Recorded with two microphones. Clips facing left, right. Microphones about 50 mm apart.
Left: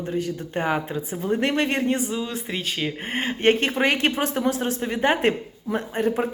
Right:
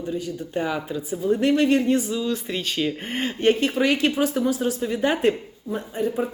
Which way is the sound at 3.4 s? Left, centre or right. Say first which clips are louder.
Even; left.